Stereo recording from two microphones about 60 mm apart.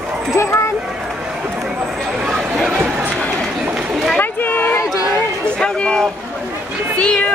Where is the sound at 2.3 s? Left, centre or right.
Centre.